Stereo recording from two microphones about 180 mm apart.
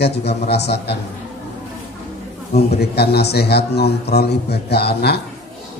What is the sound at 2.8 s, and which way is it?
A man's voice, 65° left (ahead or behind).